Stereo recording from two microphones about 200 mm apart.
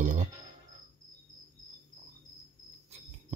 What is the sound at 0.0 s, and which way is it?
Music, 40° right (ahead or behind).